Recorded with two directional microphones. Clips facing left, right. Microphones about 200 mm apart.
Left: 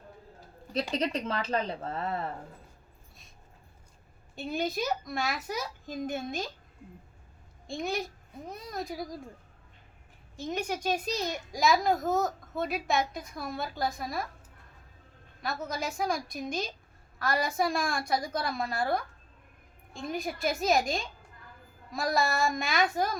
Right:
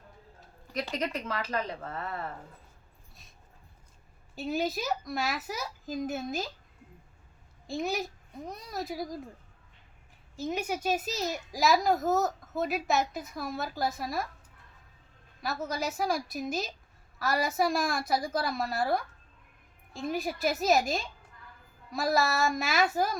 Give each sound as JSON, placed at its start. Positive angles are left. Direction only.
{"t": 0.9, "sound": "speech", "side_deg": 30}
{"t": 4.4, "sound": "a child's voice", "side_deg": 0}
{"t": 7.7, "sound": "a child's voice", "side_deg": 0}
{"t": 10.3, "sound": "a child's voice", "side_deg": -5}
{"t": 15.4, "sound": "a child's voice", "side_deg": 0}